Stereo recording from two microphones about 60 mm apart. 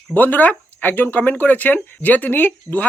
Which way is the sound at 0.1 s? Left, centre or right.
Left.